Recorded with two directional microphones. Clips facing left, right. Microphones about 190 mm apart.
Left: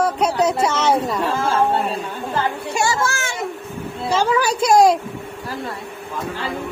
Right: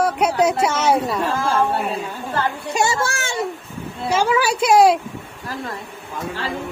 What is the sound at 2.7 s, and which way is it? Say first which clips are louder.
Speech: right 1 dB; 20° right (ahead or behind).